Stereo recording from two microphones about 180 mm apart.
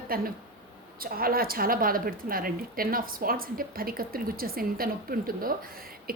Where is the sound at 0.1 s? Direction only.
55° right (ahead or behind).